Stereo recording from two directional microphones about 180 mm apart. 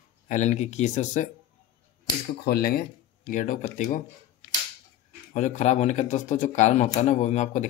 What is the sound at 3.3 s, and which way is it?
Speech, 45° left (ahead or behind).